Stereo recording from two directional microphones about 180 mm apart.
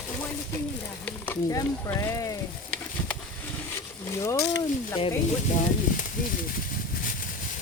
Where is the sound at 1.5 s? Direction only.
15° left (ahead or behind).